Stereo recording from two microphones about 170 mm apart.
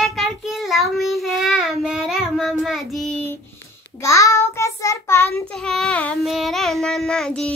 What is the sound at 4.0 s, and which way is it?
Child singing, 20° left (ahead or behind).